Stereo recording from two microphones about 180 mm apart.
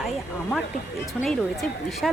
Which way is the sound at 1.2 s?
Centre (ahead or behind).